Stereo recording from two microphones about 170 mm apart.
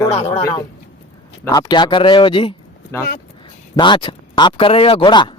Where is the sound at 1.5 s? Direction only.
25° left (ahead or behind).